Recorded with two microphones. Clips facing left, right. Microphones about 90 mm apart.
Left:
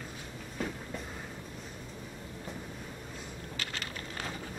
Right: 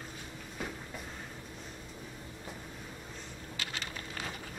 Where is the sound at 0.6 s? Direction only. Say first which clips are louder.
Left 4 dB; 5° right (ahead or behind).